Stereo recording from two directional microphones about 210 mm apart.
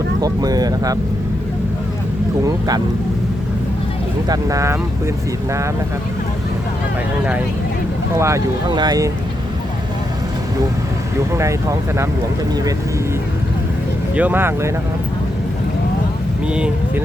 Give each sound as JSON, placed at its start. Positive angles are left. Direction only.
{"t": 0.2, "sound": "speech", "side_deg": -15}
{"t": 2.4, "sound": "speech", "side_deg": -20}
{"t": 4.3, "sound": "speech", "side_deg": -15}
{"t": 8.1, "sound": "speech", "side_deg": -15}
{"t": 11.3, "sound": "speech", "side_deg": -15}
{"t": 14.2, "sound": "speech", "side_deg": -10}
{"t": 16.5, "sound": "speech", "side_deg": -5}